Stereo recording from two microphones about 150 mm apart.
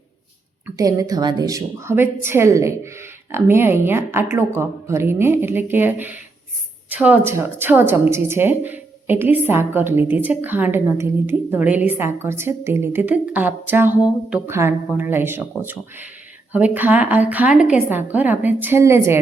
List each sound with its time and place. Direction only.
0.8 s a woman's voice: 25° right (ahead or behind)